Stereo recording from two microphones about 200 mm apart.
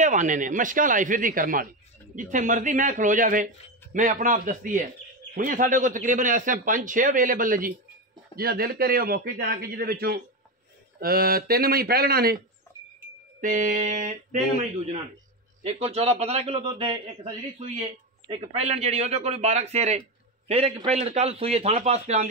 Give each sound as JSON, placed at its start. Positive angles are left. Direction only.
{"t": 0.0, "sound": "a man's voice", "side_deg": -35}
{"t": 12.7, "sound": "wind chime", "side_deg": 10}
{"t": 13.4, "sound": "a man's voice", "side_deg": -40}